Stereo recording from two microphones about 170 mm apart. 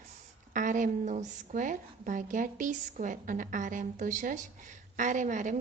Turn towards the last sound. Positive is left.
turn(degrees=-45)  # may be behind; listen again after turning